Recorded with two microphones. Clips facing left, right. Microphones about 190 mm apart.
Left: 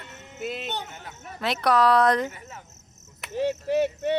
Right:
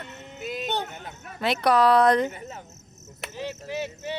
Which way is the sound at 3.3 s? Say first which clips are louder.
Left 9 dB; 65° left (ahead or behind).